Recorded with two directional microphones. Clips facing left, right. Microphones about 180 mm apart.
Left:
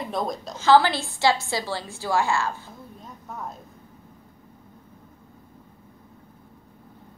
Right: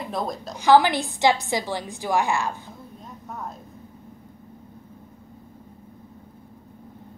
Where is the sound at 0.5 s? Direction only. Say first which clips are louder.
Right 1 dB; 15° right (ahead or behind).